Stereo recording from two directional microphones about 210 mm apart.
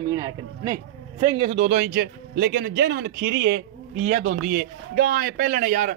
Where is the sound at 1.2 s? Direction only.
35° right (ahead or behind).